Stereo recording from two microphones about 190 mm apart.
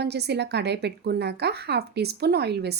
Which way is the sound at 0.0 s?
60° right (ahead or behind).